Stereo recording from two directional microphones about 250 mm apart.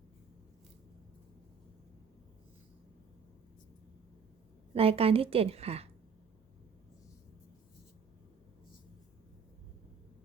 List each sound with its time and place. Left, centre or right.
4.7 s a woman's voice: right